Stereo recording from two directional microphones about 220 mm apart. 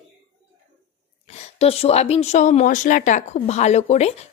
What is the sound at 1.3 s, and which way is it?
Speech, 30° left (ahead or behind).